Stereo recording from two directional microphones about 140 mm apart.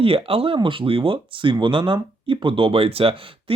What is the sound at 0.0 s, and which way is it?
Speech, 40° right (ahead or behind).